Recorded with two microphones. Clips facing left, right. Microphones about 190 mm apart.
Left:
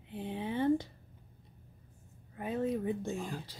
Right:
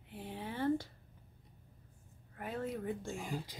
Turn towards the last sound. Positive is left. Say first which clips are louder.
# left 1 dB
turn(degrees=-15)  # may be behind; listen again after turning